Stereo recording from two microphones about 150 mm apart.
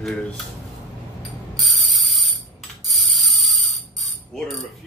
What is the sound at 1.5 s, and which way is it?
Mechanisms, centre (ahead or behind).